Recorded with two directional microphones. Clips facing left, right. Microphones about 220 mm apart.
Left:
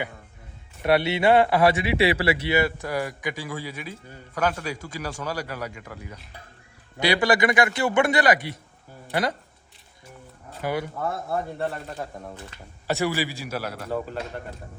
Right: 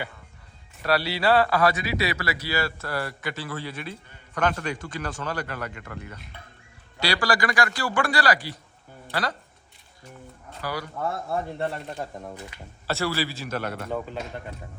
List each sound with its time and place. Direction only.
0.8 s speech: 20° left (ahead or behind)
7.0 s speech: 20° left (ahead or behind)
10.6 s speech: 20° left (ahead or behind)
10.9 s speech: centre (ahead or behind)
12.9 s speech: 15° left (ahead or behind)